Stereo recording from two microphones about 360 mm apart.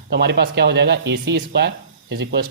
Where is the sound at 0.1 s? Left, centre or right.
Right.